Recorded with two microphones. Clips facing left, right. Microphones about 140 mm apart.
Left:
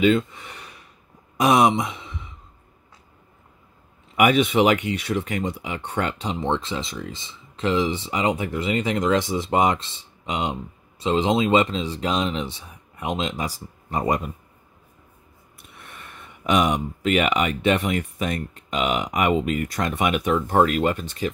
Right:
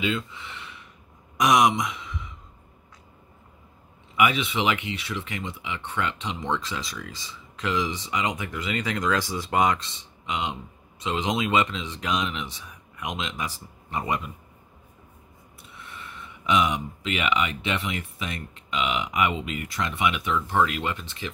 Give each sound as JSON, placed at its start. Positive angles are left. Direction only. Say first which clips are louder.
{"t": 0.0, "sound": "gasp", "louder": "left 9 dB", "side_deg": 50}
{"t": 1.4, "sound": "speech", "louder": "left 3 dB", "side_deg": 30}
{"t": 4.2, "sound": "speech", "louder": "left 6 dB", "side_deg": 45}
{"t": 15.7, "sound": "speech", "louder": "right 1 dB", "side_deg": 55}